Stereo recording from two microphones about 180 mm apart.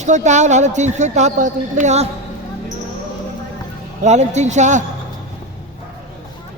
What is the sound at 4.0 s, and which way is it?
Speech, 40° right (ahead or behind).